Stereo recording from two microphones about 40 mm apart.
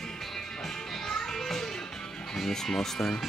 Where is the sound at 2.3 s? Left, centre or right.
Centre.